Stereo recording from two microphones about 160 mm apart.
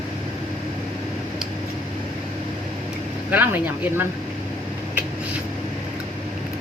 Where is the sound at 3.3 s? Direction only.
10° right (ahead or behind).